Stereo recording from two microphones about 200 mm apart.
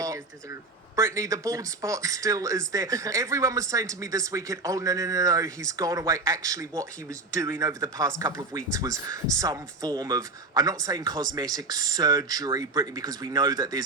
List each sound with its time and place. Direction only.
0.9 s speech: 15° right (ahead or behind)